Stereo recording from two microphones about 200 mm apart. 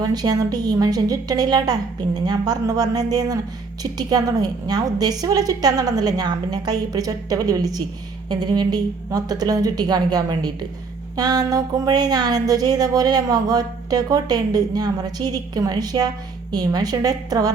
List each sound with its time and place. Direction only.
0.0 s speech: 20° right (ahead or behind)